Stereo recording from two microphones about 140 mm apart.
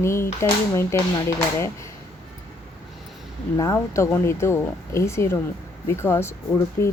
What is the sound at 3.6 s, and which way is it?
A woman's voice, 20° left (ahead or behind).